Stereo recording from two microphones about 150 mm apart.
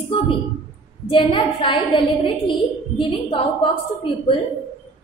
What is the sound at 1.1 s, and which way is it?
A woman's voice, 35° left (ahead or behind).